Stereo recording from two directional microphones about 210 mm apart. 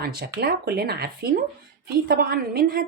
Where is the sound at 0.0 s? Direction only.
50° right (ahead or behind).